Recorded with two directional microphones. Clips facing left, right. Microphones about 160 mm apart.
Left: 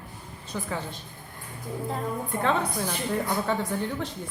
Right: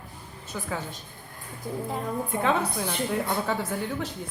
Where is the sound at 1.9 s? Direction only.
5° right (ahead or behind).